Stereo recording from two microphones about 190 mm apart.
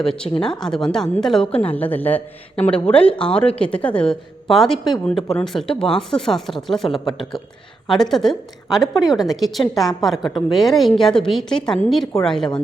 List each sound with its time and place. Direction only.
0.4 s a woman's voice: 5° left (ahead or behind)
2.8 s speech: 30° left (ahead or behind)
3.1 s a woman's voice: 5° left (ahead or behind)